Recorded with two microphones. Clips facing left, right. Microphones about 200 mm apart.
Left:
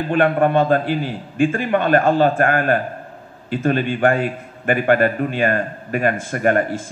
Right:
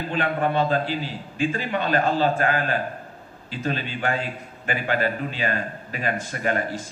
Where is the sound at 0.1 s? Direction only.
55° left (ahead or behind).